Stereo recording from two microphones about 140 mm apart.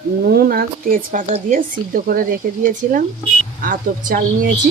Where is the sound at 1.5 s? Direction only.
75° right (ahead or behind).